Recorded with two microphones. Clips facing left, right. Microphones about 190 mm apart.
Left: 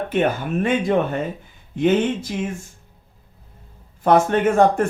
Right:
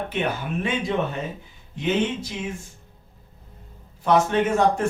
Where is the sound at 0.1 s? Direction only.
50° left (ahead or behind).